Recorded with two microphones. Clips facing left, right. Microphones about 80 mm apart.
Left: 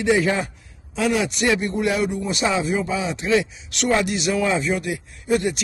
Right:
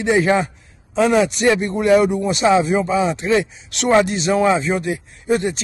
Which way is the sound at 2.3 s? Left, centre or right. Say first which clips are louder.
Right 7 dB; right.